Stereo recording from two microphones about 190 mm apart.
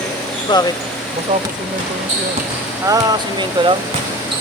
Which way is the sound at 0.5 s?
25° left (ahead or behind).